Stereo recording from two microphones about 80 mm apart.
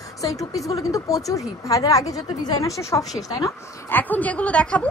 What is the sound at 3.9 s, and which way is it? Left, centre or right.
Speech, left.